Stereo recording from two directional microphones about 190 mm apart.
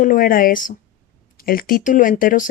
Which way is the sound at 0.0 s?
45° left (ahead or behind).